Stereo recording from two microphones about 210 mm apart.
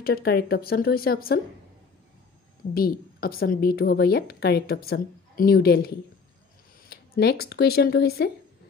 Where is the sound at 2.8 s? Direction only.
45° left (ahead or behind).